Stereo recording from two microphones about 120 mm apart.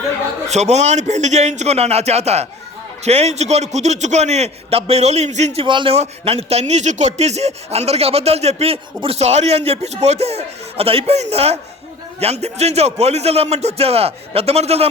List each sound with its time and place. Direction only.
0.4 s a man's voice: 65° right (ahead or behind)
5.6 s a man's voice: 40° right (ahead or behind)
5.9 s speech: 55° right (ahead or behind)